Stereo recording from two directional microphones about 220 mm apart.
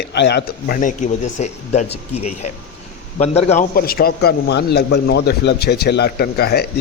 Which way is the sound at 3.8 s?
45° left (ahead or behind).